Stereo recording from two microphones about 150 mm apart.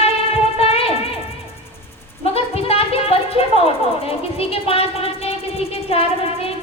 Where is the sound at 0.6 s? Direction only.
40° left (ahead or behind).